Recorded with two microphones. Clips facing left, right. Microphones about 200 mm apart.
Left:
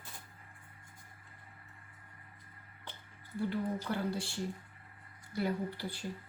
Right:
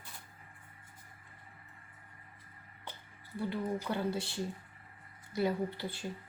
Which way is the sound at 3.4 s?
20° right (ahead or behind).